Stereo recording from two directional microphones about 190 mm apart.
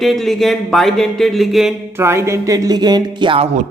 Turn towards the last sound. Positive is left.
turn(degrees=-25)  # may be behind; listen again after turning